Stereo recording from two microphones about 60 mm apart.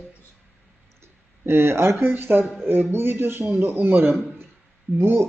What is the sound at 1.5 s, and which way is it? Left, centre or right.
A man's voice, right.